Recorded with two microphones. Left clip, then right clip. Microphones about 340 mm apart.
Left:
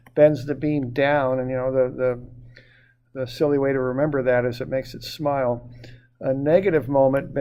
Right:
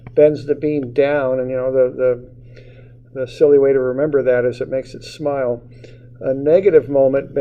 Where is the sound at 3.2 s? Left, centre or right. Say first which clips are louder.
Right 9 dB; left.